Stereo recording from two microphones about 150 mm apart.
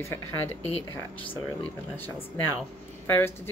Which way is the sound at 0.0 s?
15° left (ahead or behind).